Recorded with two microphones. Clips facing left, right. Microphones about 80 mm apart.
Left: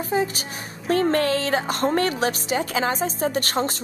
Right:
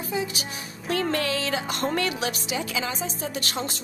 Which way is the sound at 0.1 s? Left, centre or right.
Left.